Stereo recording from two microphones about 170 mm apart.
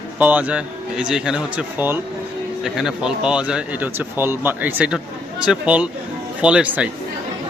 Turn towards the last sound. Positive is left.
turn(degrees=-5)  # may be behind; listen again after turning